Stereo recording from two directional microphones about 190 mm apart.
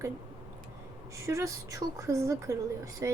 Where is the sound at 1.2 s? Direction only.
15° right (ahead or behind).